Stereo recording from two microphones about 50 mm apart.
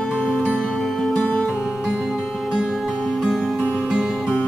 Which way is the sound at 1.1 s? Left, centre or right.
Centre.